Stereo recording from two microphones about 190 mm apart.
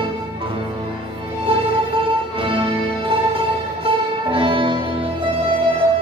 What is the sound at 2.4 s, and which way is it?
Music, 30° right (ahead or behind).